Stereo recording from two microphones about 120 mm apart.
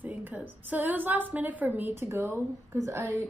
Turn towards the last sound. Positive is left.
turn(degrees=-25)  # may be behind; listen again after turning